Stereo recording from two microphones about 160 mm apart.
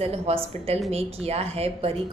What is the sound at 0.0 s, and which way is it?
Speech, 40° right (ahead or behind).